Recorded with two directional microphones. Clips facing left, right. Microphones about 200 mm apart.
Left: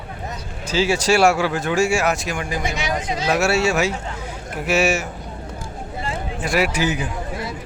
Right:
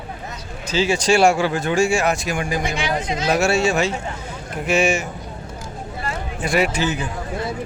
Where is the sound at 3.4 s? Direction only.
5° left (ahead or behind).